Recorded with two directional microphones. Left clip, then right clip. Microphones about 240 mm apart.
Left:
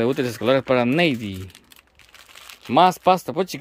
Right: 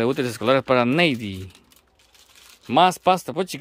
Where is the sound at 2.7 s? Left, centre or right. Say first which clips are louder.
Left 1 dB; centre.